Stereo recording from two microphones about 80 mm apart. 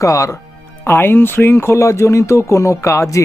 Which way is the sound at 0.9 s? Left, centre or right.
Left.